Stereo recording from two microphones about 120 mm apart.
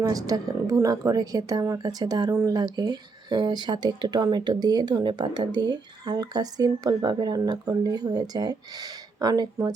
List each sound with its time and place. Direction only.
0.0 s speech: 30° right (ahead or behind)